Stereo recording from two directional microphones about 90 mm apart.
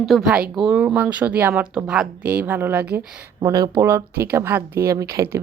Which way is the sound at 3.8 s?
30° right (ahead or behind).